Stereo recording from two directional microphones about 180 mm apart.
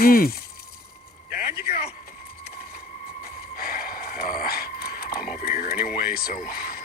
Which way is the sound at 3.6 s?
55° left (ahead or behind).